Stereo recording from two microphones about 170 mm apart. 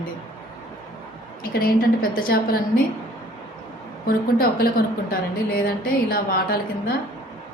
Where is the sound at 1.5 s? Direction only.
60° left (ahead or behind).